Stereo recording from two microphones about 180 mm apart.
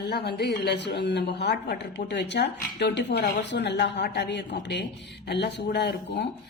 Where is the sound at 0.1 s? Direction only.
65° left (ahead or behind).